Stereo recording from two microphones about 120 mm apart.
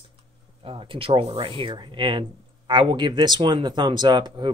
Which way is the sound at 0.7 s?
45° right (ahead or behind).